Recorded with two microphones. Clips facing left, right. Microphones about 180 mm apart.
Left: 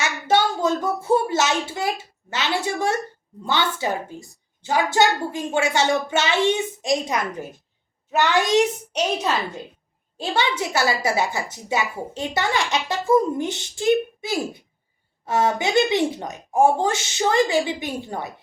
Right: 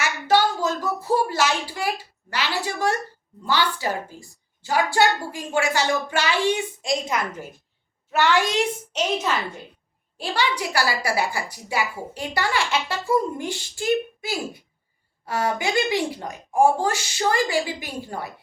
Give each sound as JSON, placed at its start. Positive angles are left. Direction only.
{"t": 0.0, "sound": "a woman's voice", "side_deg": 25}
{"t": 10.2, "sound": "a woman's voice", "side_deg": 25}